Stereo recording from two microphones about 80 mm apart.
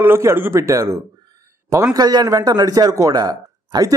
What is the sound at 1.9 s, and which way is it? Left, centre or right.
A man's voice, right.